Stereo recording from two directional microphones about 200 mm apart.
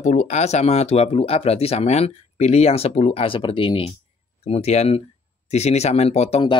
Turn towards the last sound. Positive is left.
turn(degrees=30)  # may be behind; listen again after turning